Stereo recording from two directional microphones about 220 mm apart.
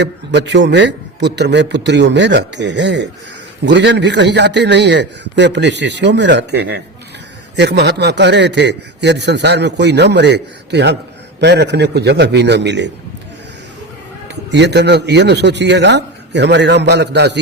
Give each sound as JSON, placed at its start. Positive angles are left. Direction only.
{"t": 0.0, "sound": "a man's voice", "side_deg": -50}
{"t": 14.5, "sound": "a man's voice", "side_deg": -50}